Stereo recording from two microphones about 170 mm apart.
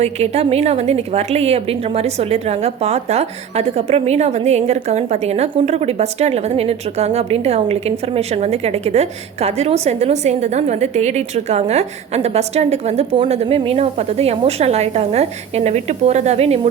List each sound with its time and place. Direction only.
0.0 s a woman's voice: 35° right (ahead or behind)